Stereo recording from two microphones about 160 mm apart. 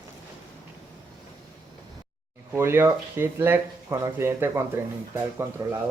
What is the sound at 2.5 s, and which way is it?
Speech, 15° right (ahead or behind).